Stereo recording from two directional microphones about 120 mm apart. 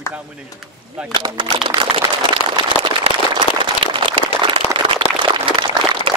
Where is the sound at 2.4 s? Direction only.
45° right (ahead or behind).